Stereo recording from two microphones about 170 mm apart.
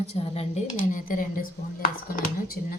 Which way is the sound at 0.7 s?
50° left (ahead or behind).